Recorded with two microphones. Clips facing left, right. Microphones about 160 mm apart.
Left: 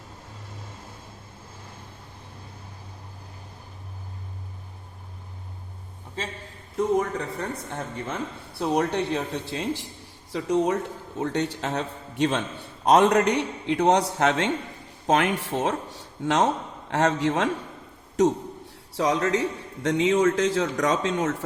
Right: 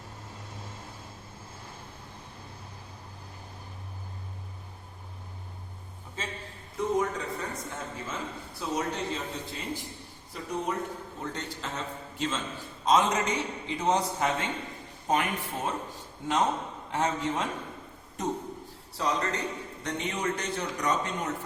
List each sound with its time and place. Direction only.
6.7 s a man's voice: 65° left (ahead or behind); by 10.8 s 90° left
11.2 s a man's voice: 75° left (ahead or behind)
18.2 s a man's voice: 90° left